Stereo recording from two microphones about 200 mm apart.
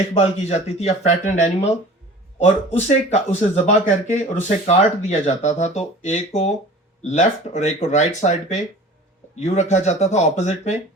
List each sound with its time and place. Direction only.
0.1 s speech: 30° left (ahead or behind)